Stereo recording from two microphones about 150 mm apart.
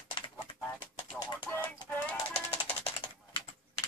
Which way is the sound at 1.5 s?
10° left (ahead or behind).